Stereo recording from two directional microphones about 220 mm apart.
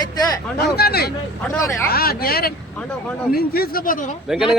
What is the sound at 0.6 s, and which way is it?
Speech, 45° left (ahead or behind).